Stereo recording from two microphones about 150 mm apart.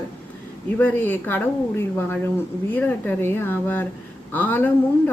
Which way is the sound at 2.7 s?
10° left (ahead or behind).